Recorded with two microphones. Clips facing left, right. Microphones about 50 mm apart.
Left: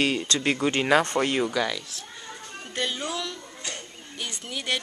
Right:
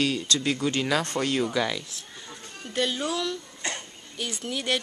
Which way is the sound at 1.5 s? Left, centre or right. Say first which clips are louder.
Even; centre.